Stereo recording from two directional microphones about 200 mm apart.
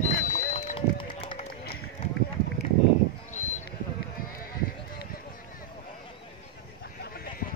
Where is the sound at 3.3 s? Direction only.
35° left (ahead or behind).